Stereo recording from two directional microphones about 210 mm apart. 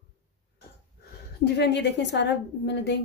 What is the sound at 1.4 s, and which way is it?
A woman's voice, 55° left (ahead or behind).